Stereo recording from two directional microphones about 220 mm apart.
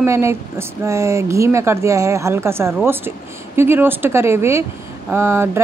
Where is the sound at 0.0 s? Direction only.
10° right (ahead or behind).